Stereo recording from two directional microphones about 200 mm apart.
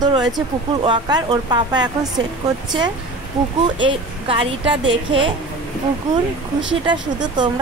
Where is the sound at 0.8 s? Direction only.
20° right (ahead or behind).